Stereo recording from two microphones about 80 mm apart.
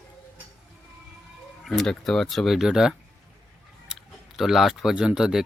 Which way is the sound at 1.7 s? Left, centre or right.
Centre.